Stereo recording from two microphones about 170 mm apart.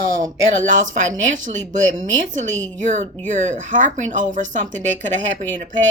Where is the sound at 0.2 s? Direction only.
50° right (ahead or behind).